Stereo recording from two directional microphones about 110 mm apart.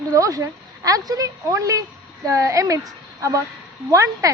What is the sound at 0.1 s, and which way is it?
A woman's voice, 30° right (ahead or behind).